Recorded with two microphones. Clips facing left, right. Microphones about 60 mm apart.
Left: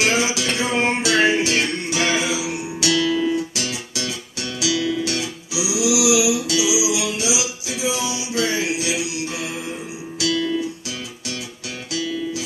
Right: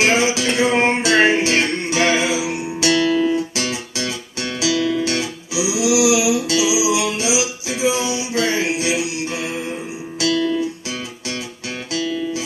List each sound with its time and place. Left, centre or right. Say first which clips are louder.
0.0 s music: right 3 dB; right